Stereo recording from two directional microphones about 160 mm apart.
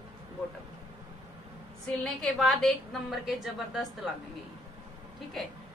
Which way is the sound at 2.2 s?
Centre (ahead or behind).